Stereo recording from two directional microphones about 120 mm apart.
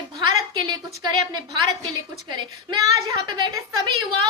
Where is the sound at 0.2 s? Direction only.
40° right (ahead or behind).